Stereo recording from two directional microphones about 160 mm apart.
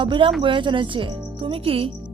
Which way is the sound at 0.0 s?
30° right (ahead or behind).